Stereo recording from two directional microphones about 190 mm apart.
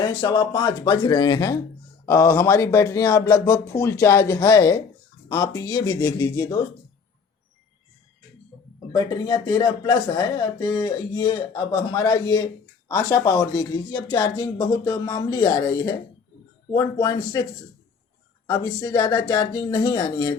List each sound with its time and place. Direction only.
0.0 s speech: 25° left (ahead or behind)
8.9 s speech: 25° left (ahead or behind)
18.4 s speech: 20° left (ahead or behind)